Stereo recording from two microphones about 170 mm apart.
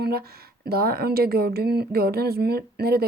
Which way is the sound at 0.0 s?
65° right (ahead or behind).